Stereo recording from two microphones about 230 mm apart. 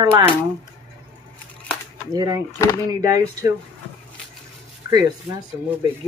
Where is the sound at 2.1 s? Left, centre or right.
Centre.